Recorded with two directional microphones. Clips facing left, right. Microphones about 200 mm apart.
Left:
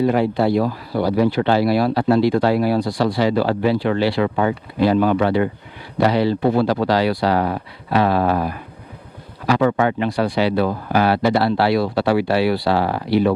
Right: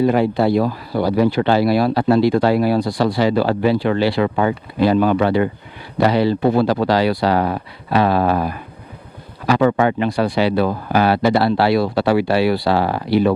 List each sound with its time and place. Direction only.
0.1 s speech: 20° right (ahead or behind)